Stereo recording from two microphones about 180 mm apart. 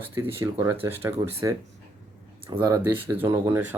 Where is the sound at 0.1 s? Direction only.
10° right (ahead or behind).